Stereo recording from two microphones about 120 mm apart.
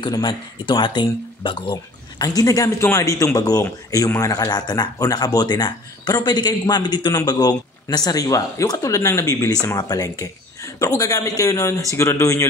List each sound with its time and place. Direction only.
0.0 s speech: 40° left (ahead or behind)
2.2 s a man's voice: 30° left (ahead or behind)